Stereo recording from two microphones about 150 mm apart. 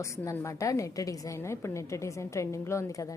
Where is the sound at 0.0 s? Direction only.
20° left (ahead or behind).